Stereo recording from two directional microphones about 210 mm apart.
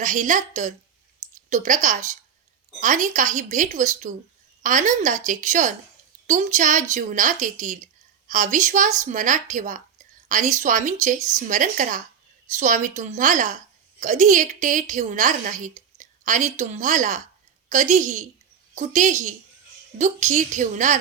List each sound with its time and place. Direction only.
0.0 s a woman's voice: 35° right (ahead or behind)